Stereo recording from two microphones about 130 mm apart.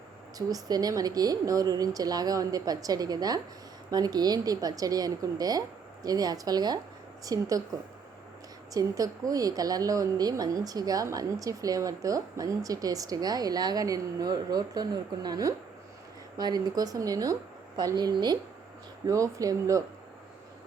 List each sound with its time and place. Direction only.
0.3 s a woman's voice: 30° right (ahead or behind)
8.7 s a woman's voice: 25° right (ahead or behind)